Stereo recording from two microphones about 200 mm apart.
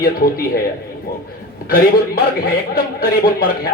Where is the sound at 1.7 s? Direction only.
50° left (ahead or behind).